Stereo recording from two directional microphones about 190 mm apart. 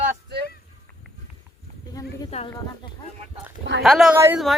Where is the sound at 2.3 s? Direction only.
35° left (ahead or behind).